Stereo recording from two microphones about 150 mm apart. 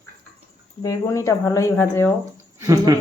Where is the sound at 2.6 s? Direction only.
20° right (ahead or behind).